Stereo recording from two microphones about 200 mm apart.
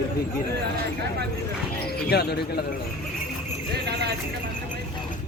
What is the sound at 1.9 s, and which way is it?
Speech, 55° left (ahead or behind).